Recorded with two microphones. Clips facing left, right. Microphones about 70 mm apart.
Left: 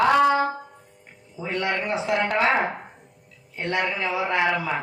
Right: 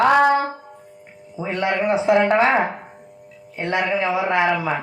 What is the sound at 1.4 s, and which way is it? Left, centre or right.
A man's voice, right.